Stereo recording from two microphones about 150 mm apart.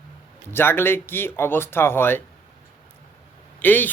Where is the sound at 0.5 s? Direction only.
15° left (ahead or behind).